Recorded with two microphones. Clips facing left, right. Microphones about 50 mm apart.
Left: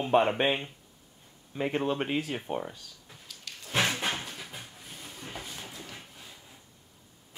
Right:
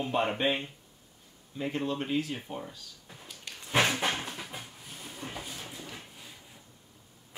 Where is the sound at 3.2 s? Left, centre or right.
Centre.